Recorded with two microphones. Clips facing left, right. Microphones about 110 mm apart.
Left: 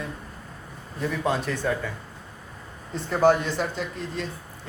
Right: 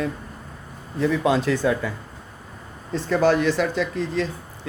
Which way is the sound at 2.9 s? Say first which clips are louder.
Right 1 dB; 90° right.